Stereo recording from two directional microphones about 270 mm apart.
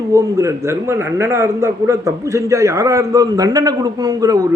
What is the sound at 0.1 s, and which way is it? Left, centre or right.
A man's voice, centre.